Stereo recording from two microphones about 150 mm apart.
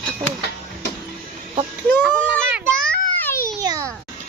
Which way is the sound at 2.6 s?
5° left (ahead or behind).